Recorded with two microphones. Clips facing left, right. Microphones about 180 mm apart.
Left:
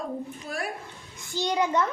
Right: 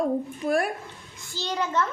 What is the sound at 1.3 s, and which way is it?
Speech, 15° left (ahead or behind).